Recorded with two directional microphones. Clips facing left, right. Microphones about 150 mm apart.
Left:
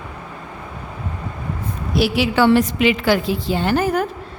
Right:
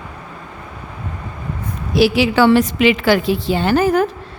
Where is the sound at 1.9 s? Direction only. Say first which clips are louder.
Right 4 dB; 90° right.